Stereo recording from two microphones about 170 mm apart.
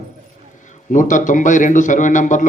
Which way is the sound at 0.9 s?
50° left (ahead or behind).